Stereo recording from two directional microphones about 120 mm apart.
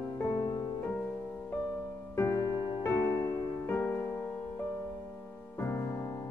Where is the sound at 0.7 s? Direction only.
15° left (ahead or behind).